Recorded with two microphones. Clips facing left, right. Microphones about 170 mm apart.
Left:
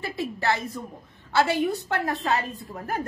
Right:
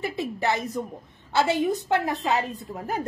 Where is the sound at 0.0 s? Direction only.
20° right (ahead or behind).